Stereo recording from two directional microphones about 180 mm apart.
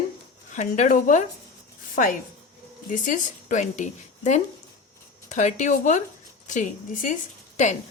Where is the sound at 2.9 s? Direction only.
45° left (ahead or behind).